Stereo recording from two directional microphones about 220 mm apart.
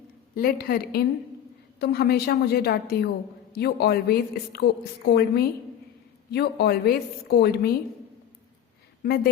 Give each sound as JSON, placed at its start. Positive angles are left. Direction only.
{"t": 0.3, "sound": "a woman's voice", "side_deg": 45}